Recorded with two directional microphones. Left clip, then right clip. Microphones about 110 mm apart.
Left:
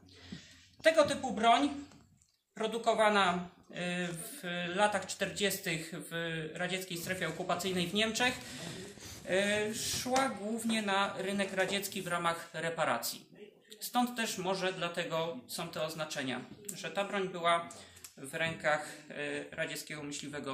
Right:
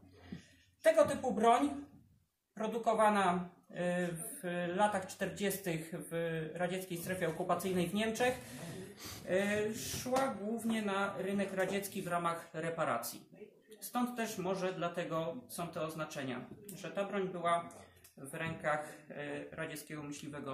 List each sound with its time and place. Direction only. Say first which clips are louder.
0.8 s speech: left 1 dB; 30° right (ahead or behind)
2.6 s speech: left 2 dB; 25° right (ahead or behind)
9.3 s speech: left 3 dB; 20° right (ahead or behind)